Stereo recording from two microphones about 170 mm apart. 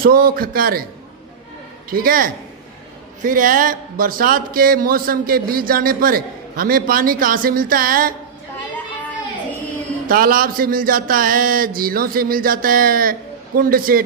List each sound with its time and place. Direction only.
0.0 s speech: 60° right (ahead or behind)
1.9 s speech: 60° right (ahead or behind)
10.0 s speech: 55° right (ahead or behind)